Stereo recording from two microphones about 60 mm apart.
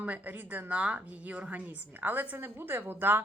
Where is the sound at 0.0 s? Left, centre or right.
Right.